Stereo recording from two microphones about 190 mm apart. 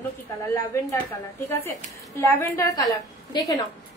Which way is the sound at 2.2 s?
10° left (ahead or behind).